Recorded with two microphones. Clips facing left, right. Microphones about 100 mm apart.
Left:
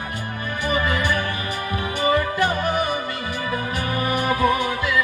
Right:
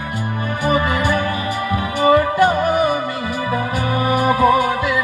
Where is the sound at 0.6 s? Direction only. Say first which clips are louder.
Right 5 dB; 20° right (ahead or behind).